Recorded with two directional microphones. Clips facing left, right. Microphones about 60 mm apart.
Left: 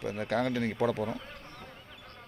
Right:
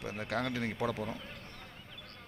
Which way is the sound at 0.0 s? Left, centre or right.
Centre.